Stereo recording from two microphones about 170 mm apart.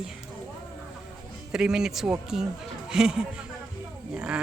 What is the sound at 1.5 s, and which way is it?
A woman's voice, 5° right (ahead or behind).